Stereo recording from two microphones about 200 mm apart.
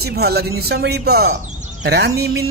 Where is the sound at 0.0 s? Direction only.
55° right (ahead or behind).